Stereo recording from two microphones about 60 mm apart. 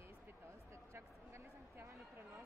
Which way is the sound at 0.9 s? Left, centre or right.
Right.